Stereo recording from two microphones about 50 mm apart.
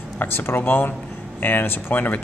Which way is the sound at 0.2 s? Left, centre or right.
Left.